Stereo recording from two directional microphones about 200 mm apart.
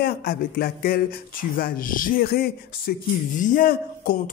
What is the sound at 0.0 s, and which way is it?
Speech, 50° left (ahead or behind).